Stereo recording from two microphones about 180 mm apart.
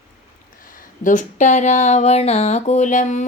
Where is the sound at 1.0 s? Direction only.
45° left (ahead or behind).